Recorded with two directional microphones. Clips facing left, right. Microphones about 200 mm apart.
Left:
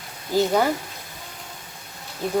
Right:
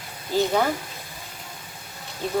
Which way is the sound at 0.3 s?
10° left (ahead or behind).